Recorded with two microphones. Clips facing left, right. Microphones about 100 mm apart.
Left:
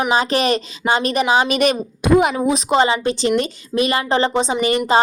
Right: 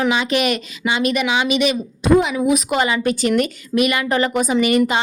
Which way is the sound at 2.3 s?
30° left (ahead or behind).